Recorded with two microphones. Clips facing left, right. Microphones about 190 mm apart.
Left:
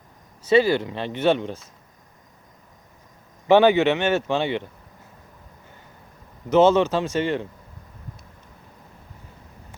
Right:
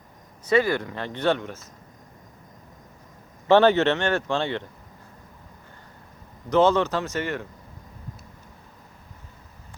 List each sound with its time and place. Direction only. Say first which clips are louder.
0.4 s speech: left 4 dB; 25° left (ahead or behind)
3.4 s speech: left 2 dB; 15° left (ahead or behind)
6.5 s speech: left 3 dB; 25° left (ahead or behind)